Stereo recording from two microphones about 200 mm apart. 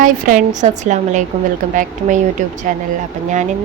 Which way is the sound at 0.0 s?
45° right (ahead or behind).